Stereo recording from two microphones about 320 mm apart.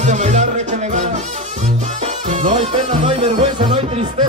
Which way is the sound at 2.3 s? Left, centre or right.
Right.